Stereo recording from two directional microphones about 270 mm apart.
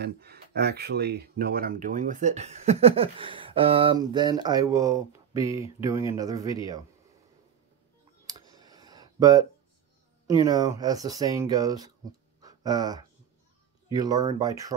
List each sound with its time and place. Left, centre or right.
0.0 s speech: right; by 6.8 s centre
8.3 s clicking: centre
10.2 s speech: centre